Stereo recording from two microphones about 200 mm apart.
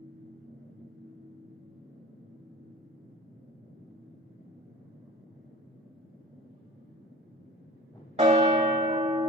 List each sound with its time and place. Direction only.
8.2 s church bell: 30° right (ahead or behind)